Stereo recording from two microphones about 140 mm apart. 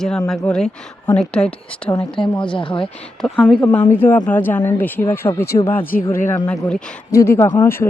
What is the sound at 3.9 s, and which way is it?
Speech, 15° left (ahead or behind).